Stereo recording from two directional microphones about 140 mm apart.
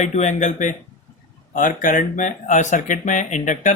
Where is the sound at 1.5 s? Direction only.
75° left (ahead or behind).